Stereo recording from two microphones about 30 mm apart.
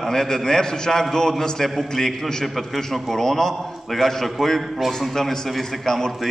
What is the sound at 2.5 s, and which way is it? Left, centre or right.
A man's voice, centre.